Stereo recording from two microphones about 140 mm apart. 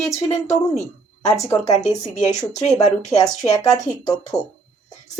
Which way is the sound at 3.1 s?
25° left (ahead or behind).